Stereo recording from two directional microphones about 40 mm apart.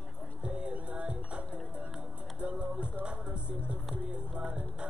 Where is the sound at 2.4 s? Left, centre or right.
Right.